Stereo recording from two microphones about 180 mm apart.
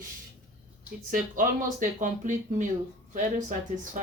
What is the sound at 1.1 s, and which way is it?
Speech, 45° right (ahead or behind).